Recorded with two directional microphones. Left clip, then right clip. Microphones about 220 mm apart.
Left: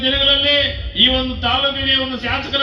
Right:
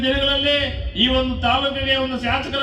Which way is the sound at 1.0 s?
45° right (ahead or behind).